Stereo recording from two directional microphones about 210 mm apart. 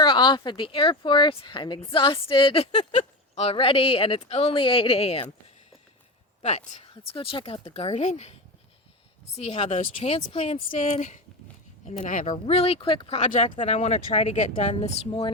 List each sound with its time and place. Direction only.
0.0 s speech: 20° left (ahead or behind)
6.4 s speech: 30° left (ahead or behind)
9.4 s speech: 30° left (ahead or behind)